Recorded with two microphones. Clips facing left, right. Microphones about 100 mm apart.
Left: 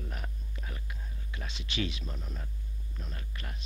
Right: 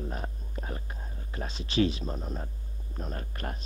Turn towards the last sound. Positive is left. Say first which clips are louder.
# right 8 dB
turn(degrees=-45)  # may be behind; listen again after turning